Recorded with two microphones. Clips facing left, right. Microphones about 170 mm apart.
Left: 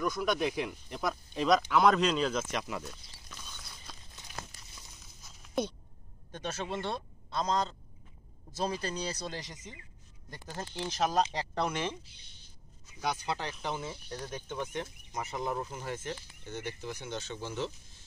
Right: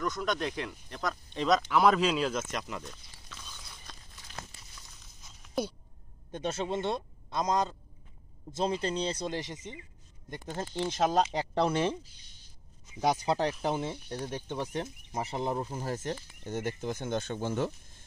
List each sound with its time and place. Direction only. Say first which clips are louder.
0.0 s speech: left 1 dB; 5° left (ahead or behind)
3.9 s crumpling: left 1 dB; 5° left (ahead or behind)
5.4 s a sound: even; centre (ahead or behind)
6.3 s a man's voice: right 4 dB; 20° right (ahead or behind); by 13.5 s 40° right (ahead or behind)
13.7 s speech: right 5 dB; 25° right (ahead or behind); by 18.0 s 50° right (ahead or behind)